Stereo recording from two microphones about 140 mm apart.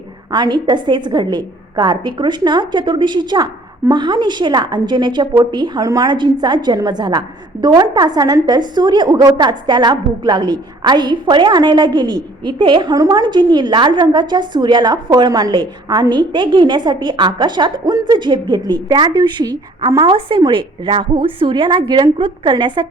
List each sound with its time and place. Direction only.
0.3 s a woman's voice: 30° right (ahead or behind)